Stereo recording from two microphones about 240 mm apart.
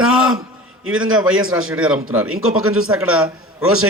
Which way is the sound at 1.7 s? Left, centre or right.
Centre.